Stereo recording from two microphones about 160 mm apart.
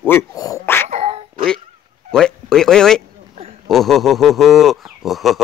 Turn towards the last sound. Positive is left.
turn(degrees=0)  # may be behind; listen again after turning